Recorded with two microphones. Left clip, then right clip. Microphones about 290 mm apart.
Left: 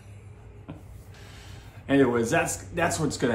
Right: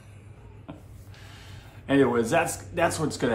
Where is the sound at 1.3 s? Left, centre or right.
Centre.